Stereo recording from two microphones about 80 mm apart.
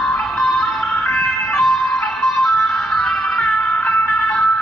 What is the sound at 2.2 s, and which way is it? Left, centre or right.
Music, centre.